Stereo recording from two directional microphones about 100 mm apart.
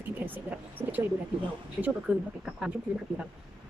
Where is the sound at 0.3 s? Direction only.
20° right (ahead or behind).